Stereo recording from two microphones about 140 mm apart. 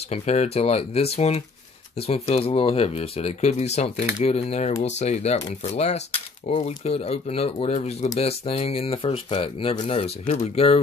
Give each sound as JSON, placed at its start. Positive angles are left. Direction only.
{"t": 0.1, "sound": "speech", "side_deg": 50}